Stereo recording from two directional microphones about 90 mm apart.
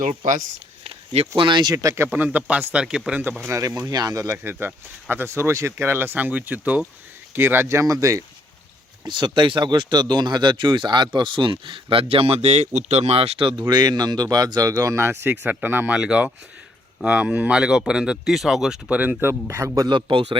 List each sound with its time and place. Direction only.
0.9 s a sound: 90° right
1.4 s speech: 60° right (ahead or behind)
1.7 s speech: 35° right (ahead or behind)
2.1 s speech: 20° right (ahead or behind)
3.8 s speech: 45° right (ahead or behind)
4.4 s speech: 25° right (ahead or behind)
9.0 s speech: 55° right (ahead or behind); by 16.0 s 20° right (ahead or behind)
16.0 s speech: 10° right (ahead or behind)
18.9 s speech: 15° right (ahead or behind); by 19.9 s 35° right (ahead or behind)
19.9 s a man's voice: 65° right (ahead or behind); by 20.4 s 80° right